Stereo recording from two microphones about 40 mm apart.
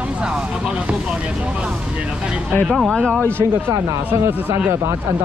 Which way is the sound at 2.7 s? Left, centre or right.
Centre.